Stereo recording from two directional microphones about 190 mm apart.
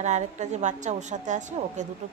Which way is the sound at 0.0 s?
40° right (ahead or behind).